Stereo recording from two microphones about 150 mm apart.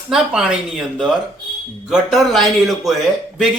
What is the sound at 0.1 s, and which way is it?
Speech, 5° right (ahead or behind).